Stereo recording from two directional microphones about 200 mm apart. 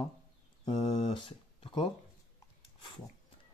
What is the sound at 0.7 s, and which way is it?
Speech, 25° left (ahead or behind).